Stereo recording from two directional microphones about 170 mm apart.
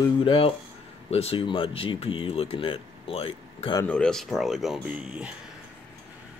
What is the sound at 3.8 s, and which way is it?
Speech, 5° left (ahead or behind).